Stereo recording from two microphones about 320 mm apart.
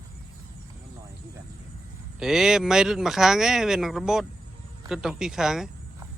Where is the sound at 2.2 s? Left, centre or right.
Centre.